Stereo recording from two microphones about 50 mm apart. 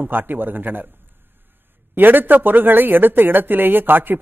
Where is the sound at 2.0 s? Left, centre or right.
Right.